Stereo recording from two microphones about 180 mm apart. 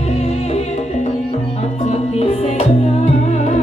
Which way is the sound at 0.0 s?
35° left (ahead or behind).